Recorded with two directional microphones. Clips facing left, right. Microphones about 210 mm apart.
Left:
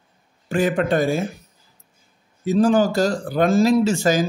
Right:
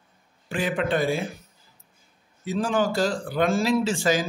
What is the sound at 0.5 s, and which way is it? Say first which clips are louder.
Speech: left 6 dB; 45° left (ahead or behind).